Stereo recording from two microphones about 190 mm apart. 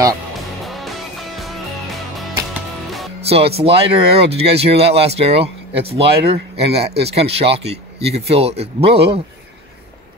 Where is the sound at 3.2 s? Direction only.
30° right (ahead or behind).